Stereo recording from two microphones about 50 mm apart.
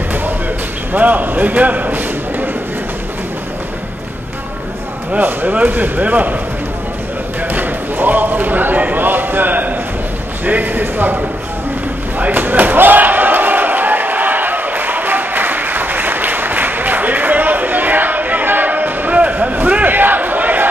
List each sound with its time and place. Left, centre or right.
0.9 s a man's voice: right
5.2 s speech: right
7.4 s basketball bounce: right
10.4 s speech: right
12.2 s slam: right
19.1 s a sound: right